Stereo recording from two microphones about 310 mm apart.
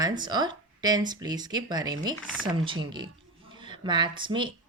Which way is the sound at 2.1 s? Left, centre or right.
Centre.